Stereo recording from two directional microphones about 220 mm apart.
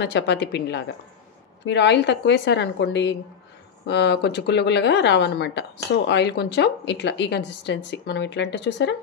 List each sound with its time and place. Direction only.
0.0 s a woman's voice: 50° left (ahead or behind)